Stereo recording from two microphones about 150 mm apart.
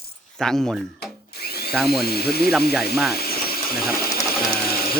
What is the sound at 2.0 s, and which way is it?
Speech, 90° left.